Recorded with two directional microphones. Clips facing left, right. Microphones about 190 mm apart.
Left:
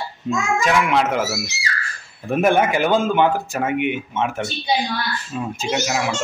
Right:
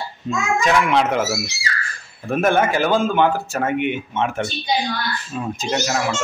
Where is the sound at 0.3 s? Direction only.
10° left (ahead or behind).